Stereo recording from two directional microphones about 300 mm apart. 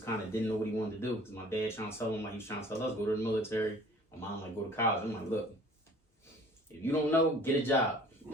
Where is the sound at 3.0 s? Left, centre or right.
Centre.